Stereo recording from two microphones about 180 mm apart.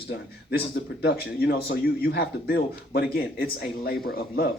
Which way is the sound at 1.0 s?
60° left (ahead or behind).